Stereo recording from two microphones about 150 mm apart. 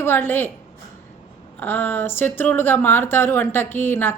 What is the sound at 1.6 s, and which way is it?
Speech, 15° left (ahead or behind).